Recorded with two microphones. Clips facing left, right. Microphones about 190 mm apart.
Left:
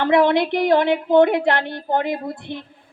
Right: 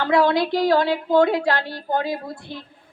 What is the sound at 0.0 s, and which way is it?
A woman's voice, 20° left (ahead or behind).